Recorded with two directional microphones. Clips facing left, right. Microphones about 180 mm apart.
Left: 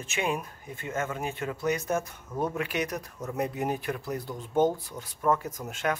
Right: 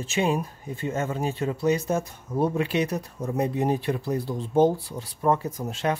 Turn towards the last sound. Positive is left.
turn(degrees=-30)  # may be behind; listen again after turning